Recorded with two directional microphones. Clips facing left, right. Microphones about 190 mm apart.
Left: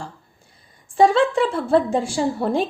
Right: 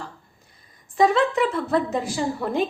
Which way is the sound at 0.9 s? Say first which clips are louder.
Left 3 dB; 30° left (ahead or behind).